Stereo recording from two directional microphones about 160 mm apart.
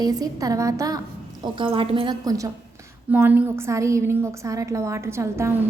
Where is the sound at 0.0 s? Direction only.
25° right (ahead or behind).